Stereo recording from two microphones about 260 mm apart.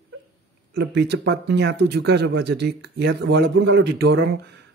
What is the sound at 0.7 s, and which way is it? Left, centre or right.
Speech, right.